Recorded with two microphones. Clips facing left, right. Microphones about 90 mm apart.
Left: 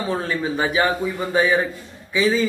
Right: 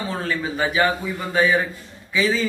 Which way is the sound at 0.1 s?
20° left (ahead or behind).